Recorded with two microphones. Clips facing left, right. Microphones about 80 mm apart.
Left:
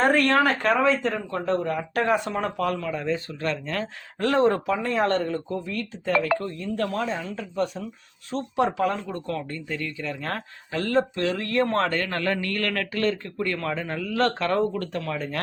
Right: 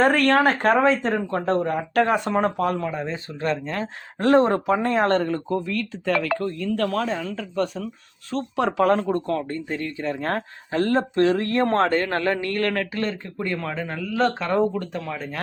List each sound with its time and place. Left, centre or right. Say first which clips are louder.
0.0 s speech: right 2 dB; right
2.6 s speech: right 3 dB; right
4.3 s speech: right 4 dB; right
5.6 s speech: right 3 dB; right
8.3 s speech: right 1 dB; right
9.0 s speech: right 6 dB; right; by 15.4 s centre